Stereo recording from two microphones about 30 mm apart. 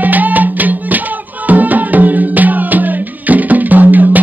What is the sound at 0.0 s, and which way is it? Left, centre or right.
Music, right.